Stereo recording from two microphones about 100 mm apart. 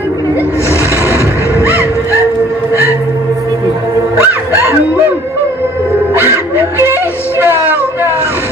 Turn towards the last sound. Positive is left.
turn(degrees=-25)  # may be behind; listen again after turning